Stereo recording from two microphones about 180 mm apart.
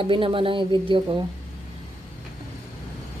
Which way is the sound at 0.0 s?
30° right (ahead or behind).